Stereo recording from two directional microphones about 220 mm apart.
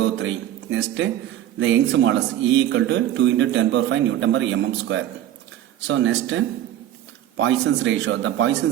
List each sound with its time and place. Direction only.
0.0 s a man's voice: 55° right (ahead or behind)